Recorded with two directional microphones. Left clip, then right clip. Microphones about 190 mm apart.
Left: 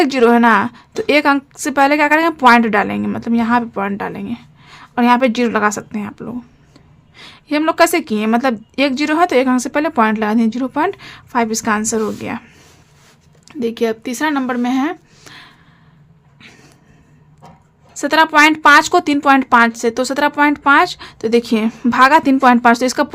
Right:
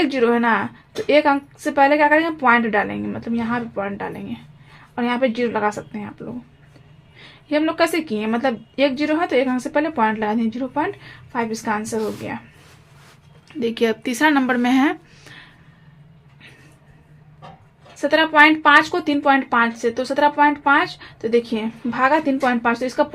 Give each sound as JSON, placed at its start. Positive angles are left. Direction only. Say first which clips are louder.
{"t": 0.0, "sound": "a woman's voice", "louder": "left 6 dB", "side_deg": 35}
{"t": 13.5, "sound": "speech", "louder": "left 2 dB", "side_deg": 25}
{"t": 15.2, "sound": "a sound", "louder": "left 4 dB", "side_deg": 35}
{"t": 17.9, "sound": "a woman's voice", "louder": "left 3 dB", "side_deg": 35}